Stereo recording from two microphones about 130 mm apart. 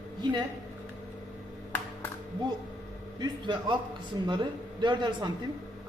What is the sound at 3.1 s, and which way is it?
A man's voice, 35° right (ahead or behind).